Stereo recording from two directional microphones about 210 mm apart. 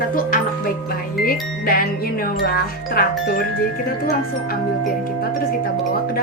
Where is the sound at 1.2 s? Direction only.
45° left (ahead or behind).